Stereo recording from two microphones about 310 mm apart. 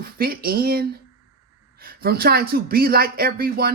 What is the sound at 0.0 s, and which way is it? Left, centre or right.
Speech, right.